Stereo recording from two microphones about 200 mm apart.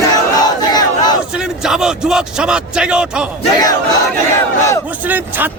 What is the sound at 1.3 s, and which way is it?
A man's voice, 5° right (ahead or behind).